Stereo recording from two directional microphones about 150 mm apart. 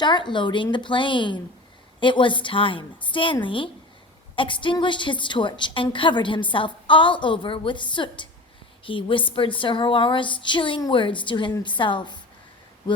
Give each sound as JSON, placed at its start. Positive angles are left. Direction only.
{"t": 0.0, "sound": "a woman's voice", "side_deg": 30}